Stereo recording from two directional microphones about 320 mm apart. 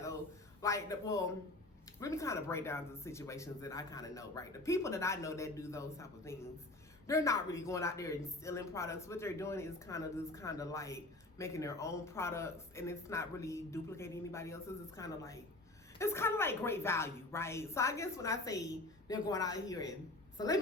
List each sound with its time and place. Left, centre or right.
0.6 s speech: centre